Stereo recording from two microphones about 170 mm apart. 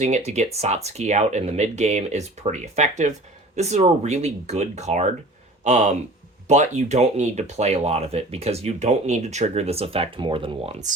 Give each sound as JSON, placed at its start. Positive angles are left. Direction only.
{"t": 0.0, "sound": "speech", "side_deg": -40}